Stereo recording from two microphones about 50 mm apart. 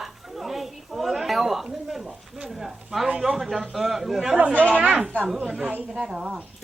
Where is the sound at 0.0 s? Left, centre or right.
Centre.